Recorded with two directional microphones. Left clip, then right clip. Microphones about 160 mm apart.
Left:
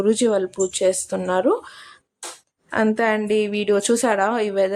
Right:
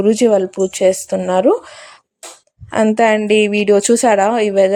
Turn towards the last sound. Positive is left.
turn(degrees=-25)  # may be behind; listen again after turning